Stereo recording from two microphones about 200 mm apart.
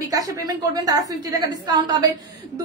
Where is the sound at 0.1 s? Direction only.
20° right (ahead or behind).